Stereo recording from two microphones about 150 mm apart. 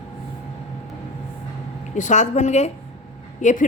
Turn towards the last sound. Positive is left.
turn(degrees=55)  # may be behind; listen again after turning